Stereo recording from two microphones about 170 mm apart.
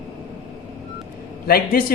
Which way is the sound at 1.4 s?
60° left (ahead or behind).